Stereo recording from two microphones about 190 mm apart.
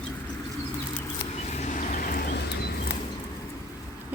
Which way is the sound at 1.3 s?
35° left (ahead or behind).